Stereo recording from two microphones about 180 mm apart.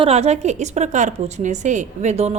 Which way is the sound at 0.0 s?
35° right (ahead or behind).